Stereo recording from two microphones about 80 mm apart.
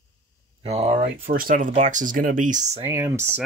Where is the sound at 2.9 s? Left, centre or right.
Right.